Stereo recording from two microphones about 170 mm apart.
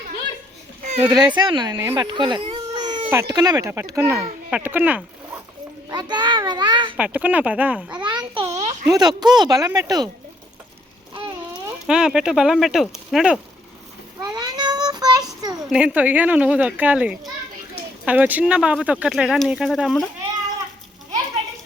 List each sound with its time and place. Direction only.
0.8 s children playing: 45° right (ahead or behind)
1.0 s speech: 25° right (ahead or behind)
1.7 s baby cry: 15° right (ahead or behind)
3.1 s speech: 20° right (ahead or behind)
5.9 s a sound: 25° right (ahead or behind)
6.9 s speech: 10° right (ahead or behind)
8.0 s a sound: 25° right (ahead or behind)
8.9 s speech: 25° right (ahead or behind)
11.9 s speech: 5° right (ahead or behind)
14.3 s a sound: 25° right (ahead or behind)
15.7 s speech: 5° right (ahead or behind)